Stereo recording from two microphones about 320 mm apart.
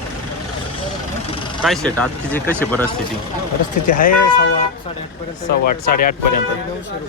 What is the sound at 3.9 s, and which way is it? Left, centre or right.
Speech, left.